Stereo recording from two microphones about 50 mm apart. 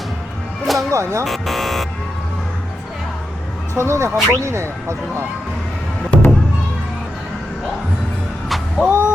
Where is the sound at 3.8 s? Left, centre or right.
Right.